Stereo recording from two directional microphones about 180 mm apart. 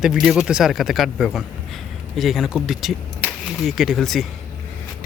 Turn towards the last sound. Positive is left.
turn(degrees=0)  # may be behind; listen again after turning